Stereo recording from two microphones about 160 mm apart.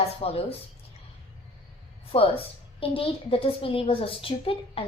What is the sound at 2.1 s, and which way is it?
A woman's voice, 35° left (ahead or behind).